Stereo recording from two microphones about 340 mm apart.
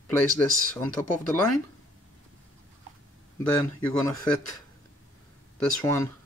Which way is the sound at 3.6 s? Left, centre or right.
Centre.